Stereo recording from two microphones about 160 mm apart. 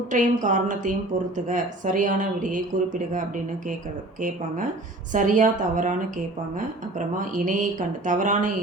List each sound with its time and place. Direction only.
0.1 s speech: 50° right (ahead or behind)
5.1 s speech: 55° right (ahead or behind)
7.3 s speech: 55° right (ahead or behind)